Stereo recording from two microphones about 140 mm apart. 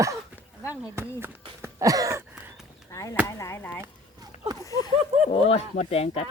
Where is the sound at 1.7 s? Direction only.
25° right (ahead or behind).